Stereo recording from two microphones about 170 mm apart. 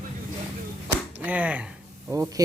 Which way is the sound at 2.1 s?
15° right (ahead or behind).